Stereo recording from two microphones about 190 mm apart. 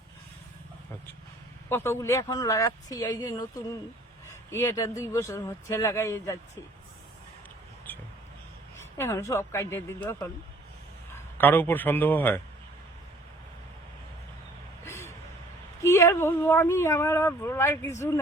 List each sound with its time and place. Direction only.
1.7 s speech: 15° left (ahead or behind)
4.5 s speech: 15° left (ahead or behind)
8.8 s speech: 15° left (ahead or behind)
14.8 s vehicle: 15° left (ahead or behind)
15.8 s speech: 15° left (ahead or behind)